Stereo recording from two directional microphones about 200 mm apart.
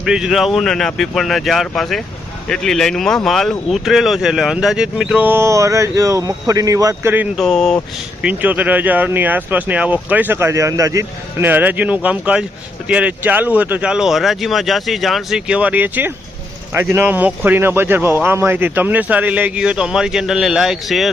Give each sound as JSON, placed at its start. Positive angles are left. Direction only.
{"t": 0.0, "sound": "speech", "side_deg": -5}
{"t": 7.4, "sound": "speech", "side_deg": 0}